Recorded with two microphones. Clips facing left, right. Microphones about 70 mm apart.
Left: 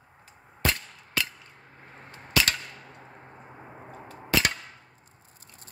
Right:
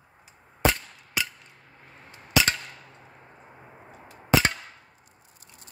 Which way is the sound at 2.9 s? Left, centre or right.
Left.